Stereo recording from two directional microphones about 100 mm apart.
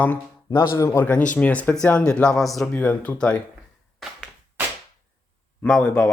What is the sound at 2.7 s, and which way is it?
Speech, 15° left (ahead or behind).